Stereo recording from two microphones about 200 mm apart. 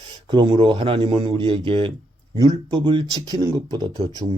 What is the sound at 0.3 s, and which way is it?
Speech, 25° right (ahead or behind).